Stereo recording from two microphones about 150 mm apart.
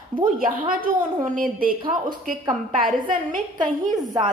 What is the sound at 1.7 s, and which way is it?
Speech, 30° right (ahead or behind).